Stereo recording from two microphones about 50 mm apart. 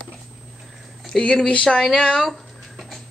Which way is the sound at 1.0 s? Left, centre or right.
Centre.